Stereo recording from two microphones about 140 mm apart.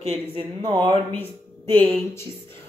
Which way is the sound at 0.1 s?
35° right (ahead or behind).